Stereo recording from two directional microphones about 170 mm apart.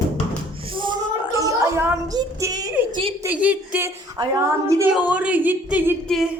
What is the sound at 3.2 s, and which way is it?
Speech, 10° right (ahead or behind).